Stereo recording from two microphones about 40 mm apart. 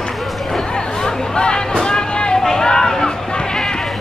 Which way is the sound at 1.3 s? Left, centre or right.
Left.